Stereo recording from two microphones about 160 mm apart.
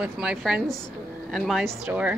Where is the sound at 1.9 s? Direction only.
10° right (ahead or behind).